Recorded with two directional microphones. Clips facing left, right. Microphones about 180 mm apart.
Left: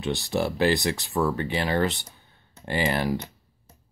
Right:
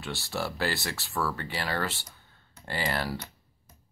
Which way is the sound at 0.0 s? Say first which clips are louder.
Left 8 dB; 20° left (ahead or behind).